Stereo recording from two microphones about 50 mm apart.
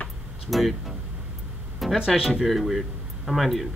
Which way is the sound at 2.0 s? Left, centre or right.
Centre.